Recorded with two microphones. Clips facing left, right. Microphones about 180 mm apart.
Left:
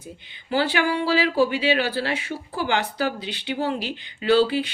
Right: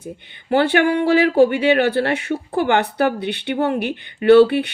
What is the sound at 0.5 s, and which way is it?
Speech, 60° right (ahead or behind).